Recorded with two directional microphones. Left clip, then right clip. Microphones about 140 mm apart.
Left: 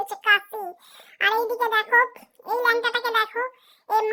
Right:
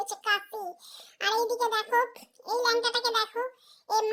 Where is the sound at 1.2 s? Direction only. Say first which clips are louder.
Left 5 dB; 40° left (ahead or behind).